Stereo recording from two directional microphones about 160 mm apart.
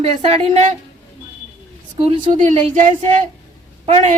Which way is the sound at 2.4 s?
50° right (ahead or behind).